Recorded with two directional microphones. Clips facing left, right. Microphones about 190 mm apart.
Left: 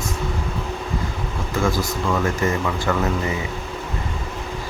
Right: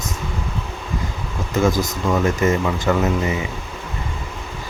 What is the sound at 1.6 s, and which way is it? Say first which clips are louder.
Speech: right 3 dB; 20° right (ahead or behind).